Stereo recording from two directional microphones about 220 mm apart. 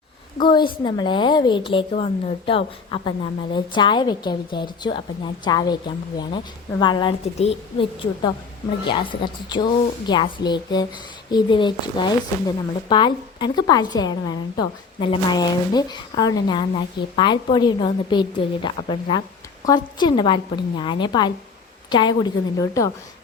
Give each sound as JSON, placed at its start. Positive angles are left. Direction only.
{"t": 0.3, "sound": "a woman's voice", "side_deg": 20}